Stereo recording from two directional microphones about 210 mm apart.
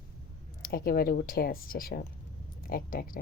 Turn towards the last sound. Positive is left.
turn(degrees=45)  # may be behind; listen again after turning